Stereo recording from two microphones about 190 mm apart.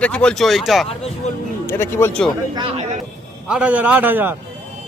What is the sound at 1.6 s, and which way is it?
Speech, 10° left (ahead or behind).